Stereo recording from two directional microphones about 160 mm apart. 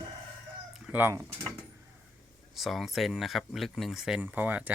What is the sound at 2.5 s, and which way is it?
Speech, centre (ahead or behind).